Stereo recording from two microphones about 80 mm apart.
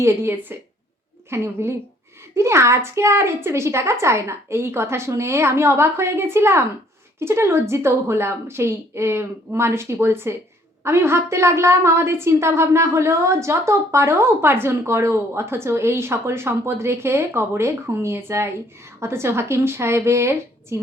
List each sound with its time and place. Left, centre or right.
0.0 s a woman's voice: right